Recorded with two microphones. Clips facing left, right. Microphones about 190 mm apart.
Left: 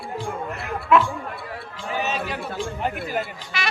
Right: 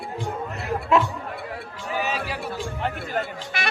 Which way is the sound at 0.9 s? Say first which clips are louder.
Left 2 dB; 35° right (ahead or behind).